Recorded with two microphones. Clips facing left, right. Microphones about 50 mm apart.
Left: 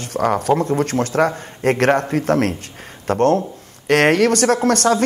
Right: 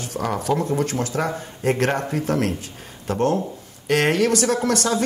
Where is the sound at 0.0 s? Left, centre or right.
Left.